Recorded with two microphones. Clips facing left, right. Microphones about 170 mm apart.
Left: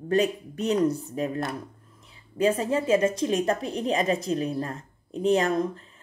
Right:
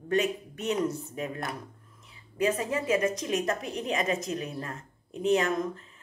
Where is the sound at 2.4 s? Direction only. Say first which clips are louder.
Left 4 dB; 30° left (ahead or behind).